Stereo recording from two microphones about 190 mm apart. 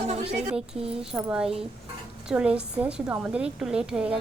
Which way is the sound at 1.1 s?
5° right (ahead or behind).